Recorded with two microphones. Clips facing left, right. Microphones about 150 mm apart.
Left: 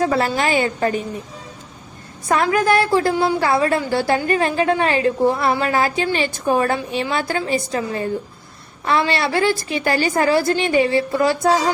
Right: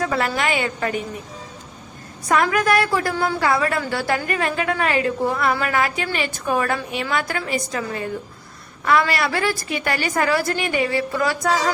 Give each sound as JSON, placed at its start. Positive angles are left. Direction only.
{"t": 0.0, "sound": "a woman's voice", "side_deg": 30}
{"t": 2.2, "sound": "a woman's voice", "side_deg": 30}